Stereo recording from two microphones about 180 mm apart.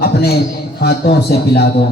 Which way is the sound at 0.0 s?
60° left (ahead or behind).